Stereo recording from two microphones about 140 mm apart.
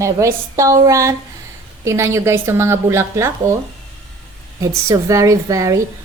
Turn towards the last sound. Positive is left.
turn(degrees=-25)  # may be behind; listen again after turning